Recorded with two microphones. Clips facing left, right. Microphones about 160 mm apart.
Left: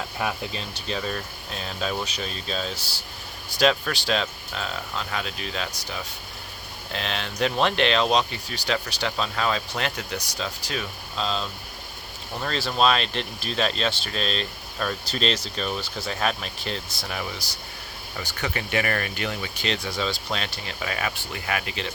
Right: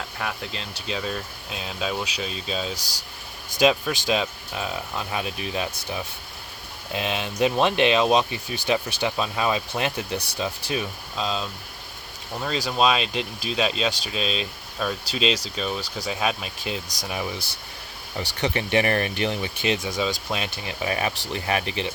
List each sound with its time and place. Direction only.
0.2 s speech: 5° left (ahead or behind); by 5.6 s 15° right (ahead or behind)
6.9 s speech: 15° right (ahead or behind)